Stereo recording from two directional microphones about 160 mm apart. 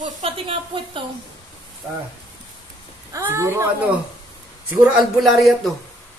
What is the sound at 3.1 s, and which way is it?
Speech, 15° right (ahead or behind).